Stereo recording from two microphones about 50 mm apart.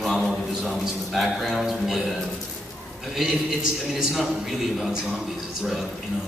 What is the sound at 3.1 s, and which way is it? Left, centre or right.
A man's voice, centre.